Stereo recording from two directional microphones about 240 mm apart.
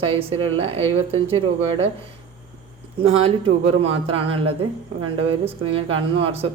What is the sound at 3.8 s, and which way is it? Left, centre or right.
Speech, right.